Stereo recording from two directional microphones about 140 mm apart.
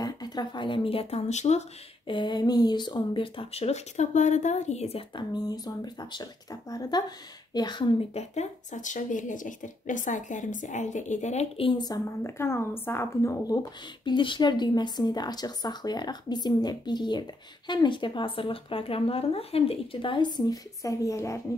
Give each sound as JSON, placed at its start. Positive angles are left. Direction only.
{"t": 0.0, "sound": "speech", "side_deg": 30}
{"t": 2.0, "sound": "speech", "side_deg": 35}
{"t": 5.3, "sound": "a woman's voice", "side_deg": 30}
{"t": 8.1, "sound": "speech", "side_deg": 55}
{"t": 11.8, "sound": "a woman's voice", "side_deg": 20}